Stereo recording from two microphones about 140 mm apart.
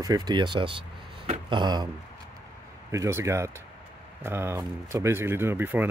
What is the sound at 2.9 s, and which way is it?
Speech, 20° right (ahead or behind).